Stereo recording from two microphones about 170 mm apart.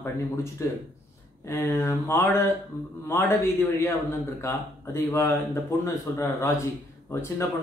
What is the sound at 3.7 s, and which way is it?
Speech, 15° left (ahead or behind).